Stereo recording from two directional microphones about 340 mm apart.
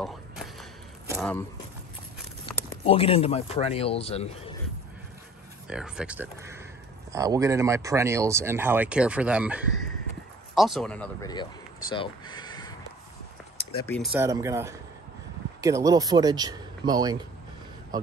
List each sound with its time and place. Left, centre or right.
0.0 s a sound: centre
2.4 s speech: centre
5.7 s speech: centre